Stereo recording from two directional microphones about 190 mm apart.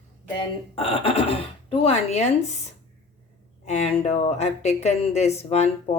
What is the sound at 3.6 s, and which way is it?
A woman's voice, 35° left (ahead or behind).